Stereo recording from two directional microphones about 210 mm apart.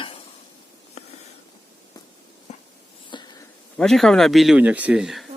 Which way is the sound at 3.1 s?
20° left (ahead or behind).